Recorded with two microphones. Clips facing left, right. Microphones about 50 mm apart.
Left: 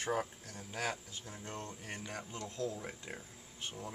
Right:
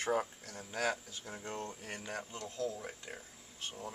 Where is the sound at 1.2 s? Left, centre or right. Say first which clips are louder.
Right 3 dB; right.